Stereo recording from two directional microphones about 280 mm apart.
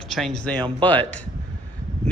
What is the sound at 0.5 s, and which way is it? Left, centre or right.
Speech, centre.